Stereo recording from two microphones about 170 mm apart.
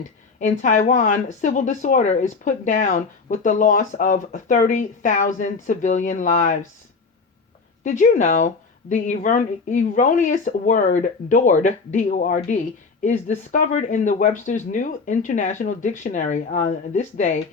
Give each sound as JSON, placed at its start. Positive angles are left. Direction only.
{"t": 0.3, "sound": "speech", "side_deg": 50}
{"t": 7.9, "sound": "speech", "side_deg": 45}